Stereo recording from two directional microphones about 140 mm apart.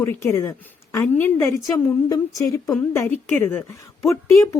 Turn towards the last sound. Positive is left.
turn(degrees=20)  # may be behind; listen again after turning